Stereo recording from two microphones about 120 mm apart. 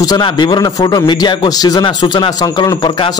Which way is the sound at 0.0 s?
35° left (ahead or behind).